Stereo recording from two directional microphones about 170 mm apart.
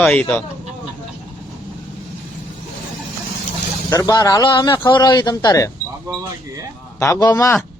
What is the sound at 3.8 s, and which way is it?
A man's voice, 20° left (ahead or behind).